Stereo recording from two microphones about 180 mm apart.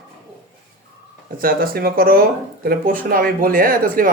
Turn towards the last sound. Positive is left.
turn(degrees=-50)  # may be behind; listen again after turning